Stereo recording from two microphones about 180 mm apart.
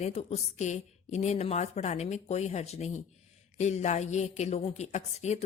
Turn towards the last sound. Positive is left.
turn(degrees=35)  # may be behind; listen again after turning